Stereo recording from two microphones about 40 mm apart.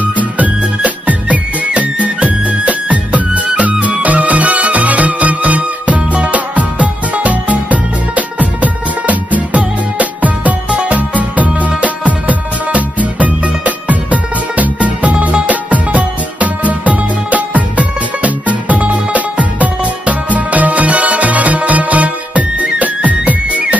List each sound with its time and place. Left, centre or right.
0.0 s music: right